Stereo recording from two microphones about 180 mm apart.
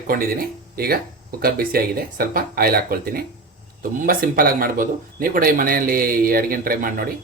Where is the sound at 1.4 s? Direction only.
55° right (ahead or behind).